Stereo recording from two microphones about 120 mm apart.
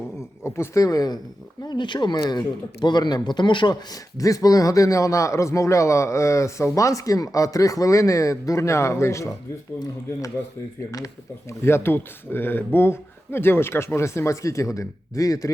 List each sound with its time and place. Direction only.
0.2 s speech: 25° left (ahead or behind); by 3.8 s 40° left (ahead or behind)
4.2 s a man's voice: 30° left (ahead or behind)
11.6 s a man's voice: 20° left (ahead or behind)